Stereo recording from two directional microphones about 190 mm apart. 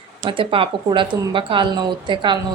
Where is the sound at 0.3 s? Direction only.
25° right (ahead or behind).